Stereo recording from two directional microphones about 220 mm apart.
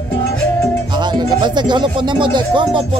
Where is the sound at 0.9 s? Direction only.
20° right (ahead or behind).